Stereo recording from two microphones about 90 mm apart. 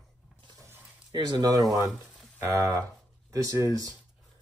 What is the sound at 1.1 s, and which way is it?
Speech, 50° right (ahead or behind).